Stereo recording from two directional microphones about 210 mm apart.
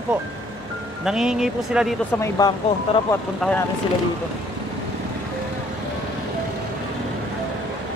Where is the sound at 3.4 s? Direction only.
5° left (ahead or behind).